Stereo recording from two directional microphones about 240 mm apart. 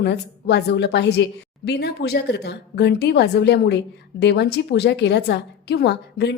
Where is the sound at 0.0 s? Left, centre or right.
Left.